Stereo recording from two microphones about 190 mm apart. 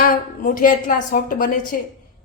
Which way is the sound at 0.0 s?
45° left (ahead or behind).